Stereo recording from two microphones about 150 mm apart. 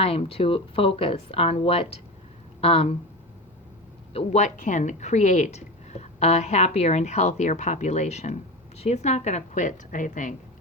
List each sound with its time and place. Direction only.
0.0 s speech: 40° left (ahead or behind)
4.1 s a woman's voice: 45° left (ahead or behind); by 10.3 s 60° left (ahead or behind)